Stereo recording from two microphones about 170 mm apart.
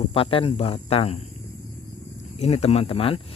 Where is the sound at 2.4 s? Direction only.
40° left (ahead or behind).